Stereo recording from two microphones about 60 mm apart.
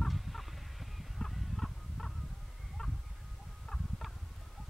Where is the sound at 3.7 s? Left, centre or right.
Centre.